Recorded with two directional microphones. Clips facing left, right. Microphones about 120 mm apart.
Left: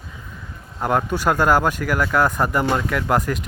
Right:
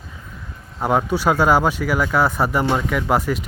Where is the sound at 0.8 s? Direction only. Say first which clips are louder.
Right 2 dB; 5° right (ahead or behind).